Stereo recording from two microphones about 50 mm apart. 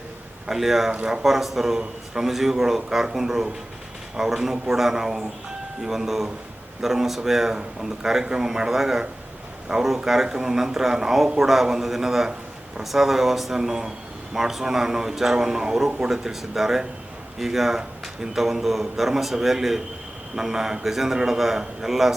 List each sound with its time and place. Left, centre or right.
0.4 s speech: centre
0.9 s speech: centre
1.2 s a man's voice: centre